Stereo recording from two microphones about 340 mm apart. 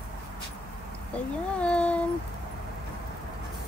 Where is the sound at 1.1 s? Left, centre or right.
Centre.